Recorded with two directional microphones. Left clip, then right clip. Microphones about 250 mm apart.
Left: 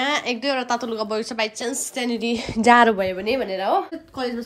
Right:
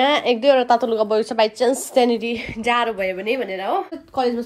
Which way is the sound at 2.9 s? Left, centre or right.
Centre.